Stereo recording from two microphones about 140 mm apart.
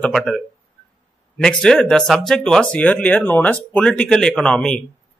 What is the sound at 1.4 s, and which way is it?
Speech, 5° left (ahead or behind).